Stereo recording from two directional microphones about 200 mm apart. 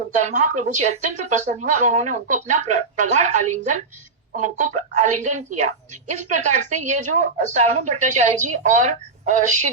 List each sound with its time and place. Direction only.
0.2 s a woman's voice: 35° right (ahead or behind)